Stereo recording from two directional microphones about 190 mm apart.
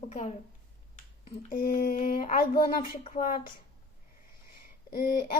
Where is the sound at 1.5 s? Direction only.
50° left (ahead or behind).